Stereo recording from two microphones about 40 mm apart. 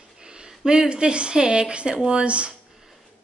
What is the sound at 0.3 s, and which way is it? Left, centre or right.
A woman's voice, right.